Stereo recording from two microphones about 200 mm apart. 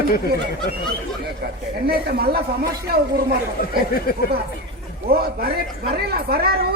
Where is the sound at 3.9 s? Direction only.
50° left (ahead or behind).